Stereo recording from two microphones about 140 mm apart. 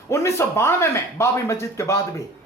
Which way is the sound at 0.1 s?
20° left (ahead or behind).